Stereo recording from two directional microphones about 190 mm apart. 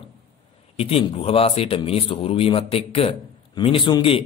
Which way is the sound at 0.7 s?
30° left (ahead or behind).